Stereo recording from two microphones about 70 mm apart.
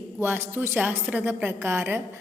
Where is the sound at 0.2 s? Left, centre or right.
Right.